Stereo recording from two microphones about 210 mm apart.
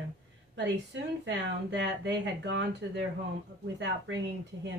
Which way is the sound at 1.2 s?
55° right (ahead or behind).